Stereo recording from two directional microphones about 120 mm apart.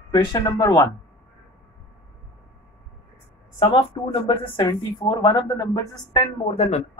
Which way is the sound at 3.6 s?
50° left (ahead or behind).